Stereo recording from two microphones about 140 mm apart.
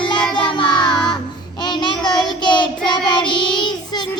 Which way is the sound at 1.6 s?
35° left (ahead or behind).